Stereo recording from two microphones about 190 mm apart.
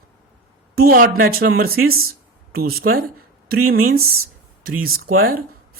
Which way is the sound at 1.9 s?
90° right.